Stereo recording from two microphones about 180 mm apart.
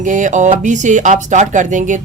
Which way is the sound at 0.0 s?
45° right (ahead or behind).